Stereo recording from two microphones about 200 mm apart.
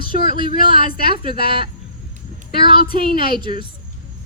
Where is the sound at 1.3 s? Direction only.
50° left (ahead or behind).